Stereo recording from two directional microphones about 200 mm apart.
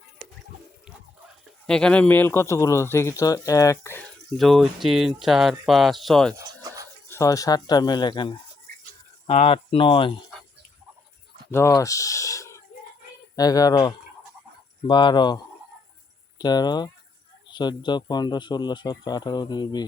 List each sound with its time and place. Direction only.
1.6 s a man's voice: 5° left (ahead or behind)
4.4 s speech: centre (ahead or behind)
6.3 s a sound: 15° right (ahead or behind)
7.1 s speech: 15° left (ahead or behind)
11.5 s speech: 15° left (ahead or behind)
16.4 s speech: 20° left (ahead or behind)